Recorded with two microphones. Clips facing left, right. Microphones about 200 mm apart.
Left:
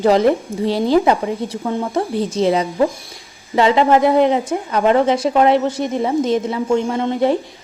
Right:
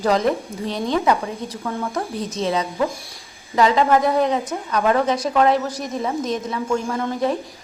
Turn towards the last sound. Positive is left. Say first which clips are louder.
# left 5 dB
turn(degrees=30)  # may be behind; listen again after turning